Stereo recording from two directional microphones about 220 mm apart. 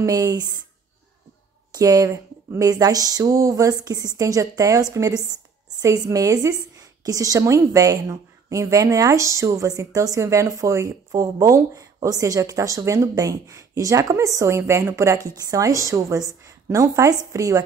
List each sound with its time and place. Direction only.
0.0 s a woman's voice: 15° right (ahead or behind)
1.7 s a woman's voice: 15° right (ahead or behind)